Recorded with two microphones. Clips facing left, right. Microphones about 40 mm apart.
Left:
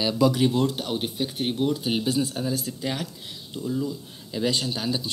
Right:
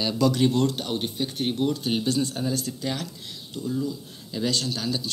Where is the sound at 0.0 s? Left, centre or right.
Centre.